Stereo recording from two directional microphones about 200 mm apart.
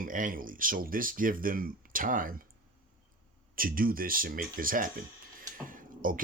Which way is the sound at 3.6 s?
45° right (ahead or behind).